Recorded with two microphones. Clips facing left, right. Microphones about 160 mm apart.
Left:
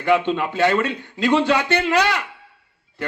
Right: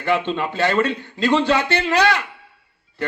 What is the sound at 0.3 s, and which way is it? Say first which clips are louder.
A man's voice: left 2 dB; 15° left (ahead or behind).